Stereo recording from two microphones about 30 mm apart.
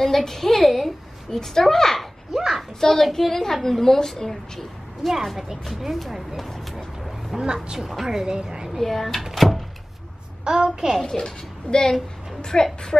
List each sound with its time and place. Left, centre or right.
0.0 s a sound: centre
1.3 s a woman's voice: centre
2.3 s a sound: centre
2.8 s a woman's voice: centre
5.8 s speech: centre
7.3 s a woman's voice: centre
8.7 s speech: centre
10.4 s a child's voice: right
11.0 s a woman's voice: centre
11.2 s a child's voice: left